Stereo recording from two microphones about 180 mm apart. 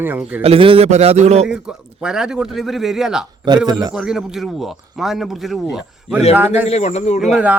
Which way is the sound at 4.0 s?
5° right (ahead or behind).